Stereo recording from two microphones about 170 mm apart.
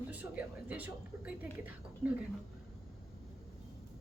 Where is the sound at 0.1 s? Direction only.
10° right (ahead or behind).